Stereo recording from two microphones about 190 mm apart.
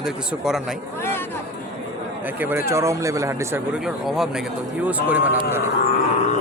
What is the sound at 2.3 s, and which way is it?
Speech, 10° right (ahead or behind).